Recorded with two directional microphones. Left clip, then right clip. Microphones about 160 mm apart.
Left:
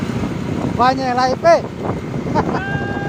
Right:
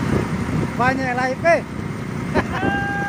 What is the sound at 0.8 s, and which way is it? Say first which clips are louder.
Speech: left 5 dB; 20° left (ahead or behind).